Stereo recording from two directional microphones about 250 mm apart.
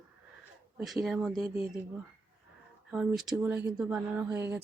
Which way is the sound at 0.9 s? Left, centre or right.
Centre.